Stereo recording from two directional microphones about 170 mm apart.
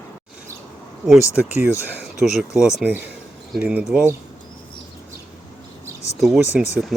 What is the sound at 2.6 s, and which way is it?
Speech, 5° right (ahead or behind).